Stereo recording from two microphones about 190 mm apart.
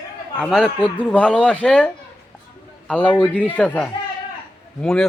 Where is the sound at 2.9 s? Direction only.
5° left (ahead or behind).